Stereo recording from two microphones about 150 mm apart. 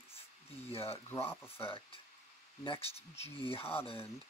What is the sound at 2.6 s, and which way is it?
Speech, 40° left (ahead or behind).